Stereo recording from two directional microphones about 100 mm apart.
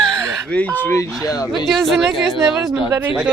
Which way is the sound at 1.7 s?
Centre (ahead or behind).